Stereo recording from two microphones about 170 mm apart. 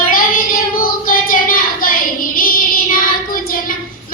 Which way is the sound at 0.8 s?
55° left (ahead or behind).